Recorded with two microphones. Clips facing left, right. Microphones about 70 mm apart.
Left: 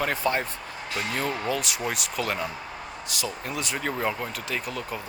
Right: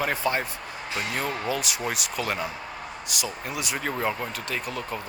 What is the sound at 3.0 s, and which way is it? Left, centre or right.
Speech, centre.